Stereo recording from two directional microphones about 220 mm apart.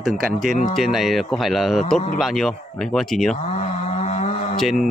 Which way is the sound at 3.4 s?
30° left (ahead or behind).